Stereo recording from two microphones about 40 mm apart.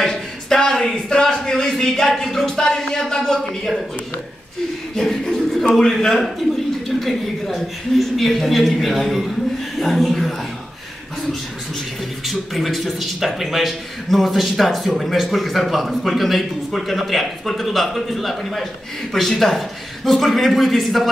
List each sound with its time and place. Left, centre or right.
0.0 s a sound: centre
4.9 s a man's voice: centre
12.3 s a man's voice: centre